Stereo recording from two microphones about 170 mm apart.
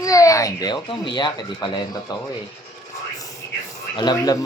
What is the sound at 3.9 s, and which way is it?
Speech, 25° left (ahead or behind).